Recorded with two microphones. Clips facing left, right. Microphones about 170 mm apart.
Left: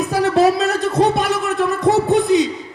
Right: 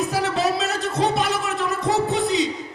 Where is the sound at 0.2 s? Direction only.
55° left (ahead or behind).